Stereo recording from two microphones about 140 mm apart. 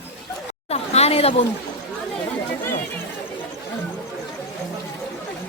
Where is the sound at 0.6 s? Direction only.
45° left (ahead or behind).